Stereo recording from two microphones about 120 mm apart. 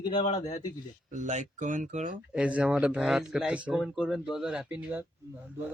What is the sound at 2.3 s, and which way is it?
A man's voice, 10° right (ahead or behind).